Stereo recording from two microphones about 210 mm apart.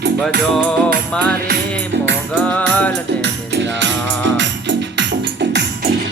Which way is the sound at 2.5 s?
5° left (ahead or behind).